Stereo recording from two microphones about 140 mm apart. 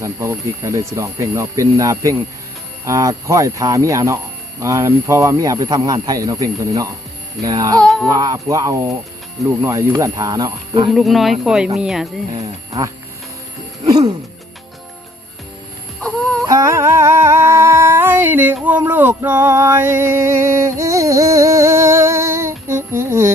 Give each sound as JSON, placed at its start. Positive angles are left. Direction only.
{"t": 0.0, "sound": "speech", "side_deg": -20}
{"t": 7.8, "sound": "a sound", "side_deg": 5}
{"t": 8.1, "sound": "speech", "side_deg": -25}
{"t": 10.9, "sound": "speech", "side_deg": 0}
{"t": 13.8, "sound": "music", "side_deg": -25}
{"t": 16.5, "sound": "a sound", "side_deg": -20}
{"t": 18.8, "sound": "male singing", "side_deg": -15}